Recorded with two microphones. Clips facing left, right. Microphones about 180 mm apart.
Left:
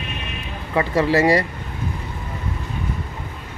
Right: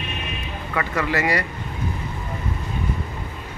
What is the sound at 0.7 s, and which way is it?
Speech, 30° left (ahead or behind).